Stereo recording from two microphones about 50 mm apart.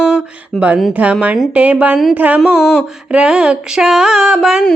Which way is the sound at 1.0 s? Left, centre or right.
Right.